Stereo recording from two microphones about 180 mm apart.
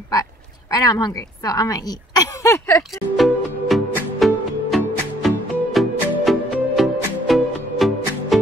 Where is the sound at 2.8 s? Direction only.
Centre (ahead or behind).